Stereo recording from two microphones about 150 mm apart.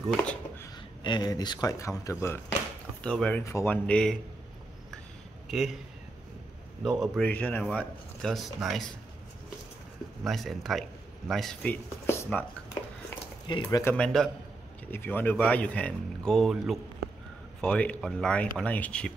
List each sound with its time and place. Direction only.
0.2 s a sound: 5° left (ahead or behind)
1.0 s speech: 30° left (ahead or behind)
3.0 s speech: 5° left (ahead or behind)
5.5 s speech: centre (ahead or behind)
6.8 s speech: centre (ahead or behind)
7.2 s speech: 10° left (ahead or behind)
10.2 s a man's voice: centre (ahead or behind)
11.7 s a sound: 15° left (ahead or behind)
13.5 s speech: 30° left (ahead or behind)
13.9 s speech: 5° left (ahead or behind)